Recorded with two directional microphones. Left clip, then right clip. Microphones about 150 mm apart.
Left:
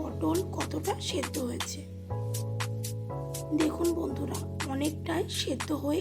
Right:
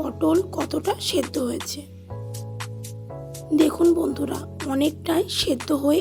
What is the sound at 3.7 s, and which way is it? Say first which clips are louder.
Speech: right 10 dB; 45° right (ahead or behind).